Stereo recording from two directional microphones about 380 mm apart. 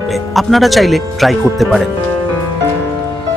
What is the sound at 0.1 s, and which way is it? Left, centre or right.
Speech, centre.